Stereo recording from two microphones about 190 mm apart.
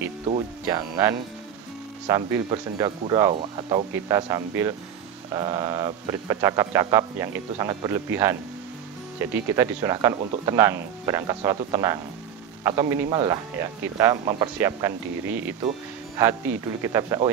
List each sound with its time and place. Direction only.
0.7 s speech: 15° right (ahead or behind)